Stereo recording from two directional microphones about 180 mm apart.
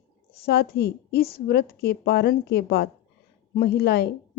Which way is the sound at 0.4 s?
60° left (ahead or behind).